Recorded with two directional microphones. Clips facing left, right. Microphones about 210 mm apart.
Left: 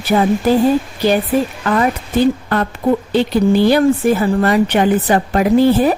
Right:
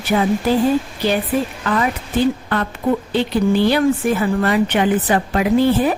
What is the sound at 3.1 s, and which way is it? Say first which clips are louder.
A woman's voice: left 4 dB; 40° left (ahead or behind).